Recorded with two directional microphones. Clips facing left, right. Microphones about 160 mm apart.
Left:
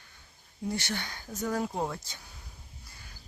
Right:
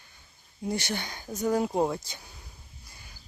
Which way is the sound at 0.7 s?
15° right (ahead or behind).